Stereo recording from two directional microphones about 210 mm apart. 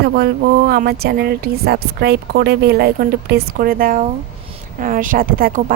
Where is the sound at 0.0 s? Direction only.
50° right (ahead or behind).